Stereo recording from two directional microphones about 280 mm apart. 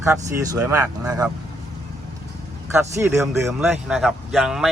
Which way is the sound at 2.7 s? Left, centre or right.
Centre.